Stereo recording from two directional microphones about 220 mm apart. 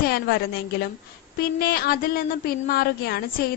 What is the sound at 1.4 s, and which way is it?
A woman's voice, 45° left (ahead or behind).